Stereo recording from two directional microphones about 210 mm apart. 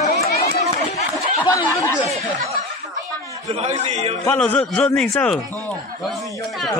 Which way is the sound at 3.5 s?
30° right (ahead or behind).